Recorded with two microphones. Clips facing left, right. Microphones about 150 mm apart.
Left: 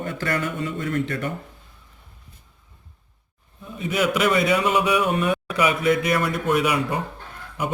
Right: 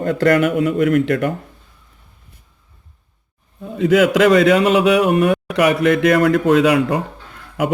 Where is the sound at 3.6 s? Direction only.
90° right.